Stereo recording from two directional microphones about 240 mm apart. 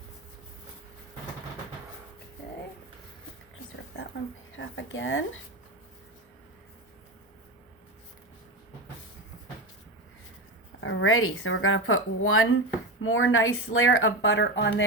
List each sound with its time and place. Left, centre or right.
4.5 s speech: left
10.8 s speech: left